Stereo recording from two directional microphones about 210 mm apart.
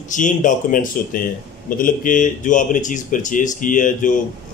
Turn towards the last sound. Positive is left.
turn(degrees=40)  # may be behind; listen again after turning